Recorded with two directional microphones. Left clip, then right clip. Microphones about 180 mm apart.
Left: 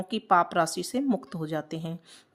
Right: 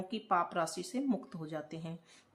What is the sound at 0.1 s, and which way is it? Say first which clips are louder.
A woman's voice: left 10 dB; 40° left (ahead or behind).